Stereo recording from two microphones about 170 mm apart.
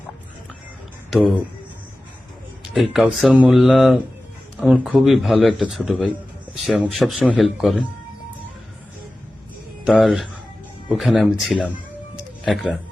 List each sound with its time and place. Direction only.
1.1 s speech: 5° right (ahead or behind)
2.7 s a man's voice: centre (ahead or behind)
9.8 s a man's voice: centre (ahead or behind)
12.1 s music: 5° right (ahead or behind)